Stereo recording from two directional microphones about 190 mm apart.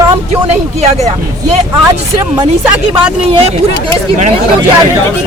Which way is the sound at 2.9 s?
30° right (ahead or behind).